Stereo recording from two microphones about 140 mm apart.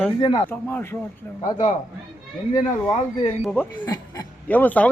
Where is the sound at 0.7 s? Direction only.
15° left (ahead or behind).